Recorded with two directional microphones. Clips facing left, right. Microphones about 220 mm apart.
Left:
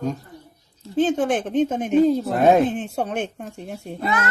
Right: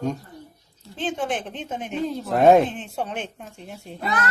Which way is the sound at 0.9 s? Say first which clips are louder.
Left 7 dB; 45° left (ahead or behind).